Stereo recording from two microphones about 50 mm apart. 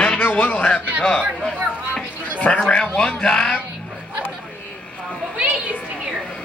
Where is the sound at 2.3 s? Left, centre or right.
Left.